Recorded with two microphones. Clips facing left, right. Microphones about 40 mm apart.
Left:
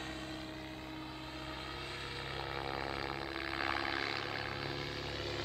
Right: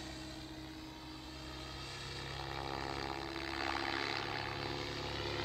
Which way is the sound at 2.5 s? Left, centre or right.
Centre.